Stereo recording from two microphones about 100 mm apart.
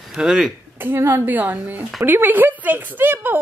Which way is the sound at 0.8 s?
25° right (ahead or behind).